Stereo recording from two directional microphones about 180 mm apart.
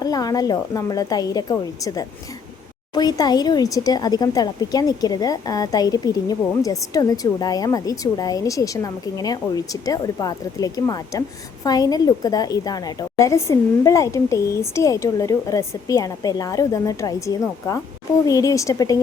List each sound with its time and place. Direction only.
0.0 s speech: 20° left (ahead or behind)